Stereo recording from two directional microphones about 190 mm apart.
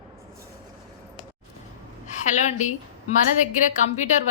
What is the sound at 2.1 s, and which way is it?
Speech, 40° left (ahead or behind).